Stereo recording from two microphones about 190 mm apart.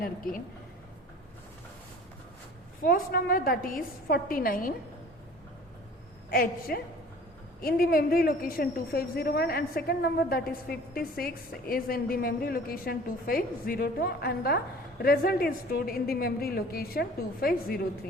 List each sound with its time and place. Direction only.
0.0 s a woman's voice: 50° left (ahead or behind)
2.8 s a woman's voice: 50° left (ahead or behind)
6.3 s a woman's voice: 50° left (ahead or behind)